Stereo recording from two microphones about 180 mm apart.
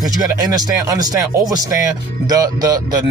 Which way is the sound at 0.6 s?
20° right (ahead or behind).